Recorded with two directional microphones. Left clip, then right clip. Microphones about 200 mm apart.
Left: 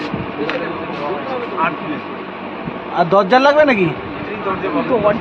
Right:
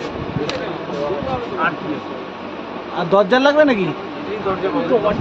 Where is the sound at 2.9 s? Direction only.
45° left (ahead or behind).